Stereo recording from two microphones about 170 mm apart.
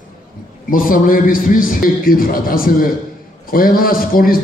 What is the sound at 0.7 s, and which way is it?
A man's voice, 55° left (ahead or behind).